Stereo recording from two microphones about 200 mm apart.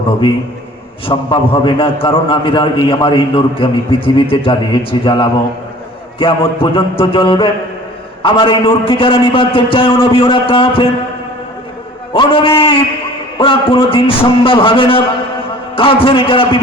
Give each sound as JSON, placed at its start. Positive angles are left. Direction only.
{"t": 1.0, "sound": "a man's voice", "side_deg": 25}
{"t": 12.1, "sound": "a sound", "side_deg": 25}
{"t": 13.4, "sound": "a man's voice", "side_deg": 25}